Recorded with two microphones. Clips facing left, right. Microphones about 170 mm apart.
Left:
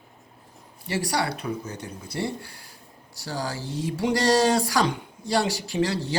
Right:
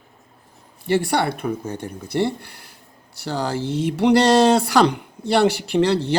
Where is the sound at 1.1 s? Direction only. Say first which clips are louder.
Right 5 dB; 55° right (ahead or behind).